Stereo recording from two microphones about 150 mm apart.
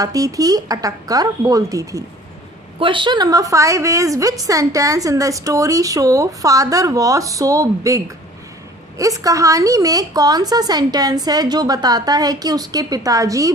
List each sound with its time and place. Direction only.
0.0 s a woman's voice: 25° right (ahead or behind)
2.7 s a woman's voice: 35° right (ahead or behind)